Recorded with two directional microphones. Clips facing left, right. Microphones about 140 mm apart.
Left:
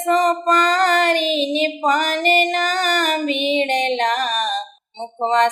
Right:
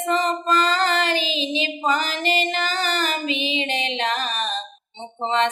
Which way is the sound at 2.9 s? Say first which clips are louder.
Left 5 dB; 60° left (ahead or behind).